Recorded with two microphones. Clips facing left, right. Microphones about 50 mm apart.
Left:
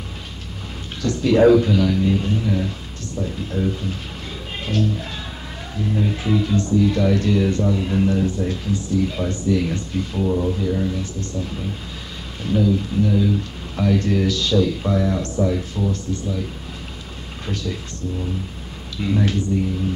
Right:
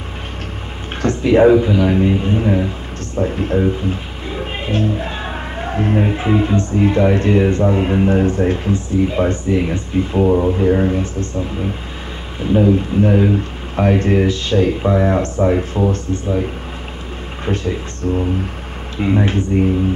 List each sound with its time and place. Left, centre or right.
1.0 s speech: right
5.6 s speech: right
12.6 s speech: right
17.5 s speech: right
18.0 s speech: right
18.9 s speech: right